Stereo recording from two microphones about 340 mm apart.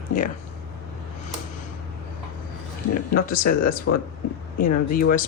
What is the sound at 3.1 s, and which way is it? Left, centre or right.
Speech, left.